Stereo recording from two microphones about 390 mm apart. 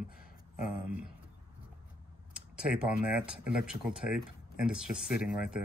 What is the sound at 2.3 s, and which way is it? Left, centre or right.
Speech, centre.